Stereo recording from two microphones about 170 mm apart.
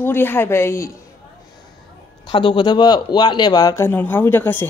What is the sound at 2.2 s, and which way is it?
Speech, 30° left (ahead or behind).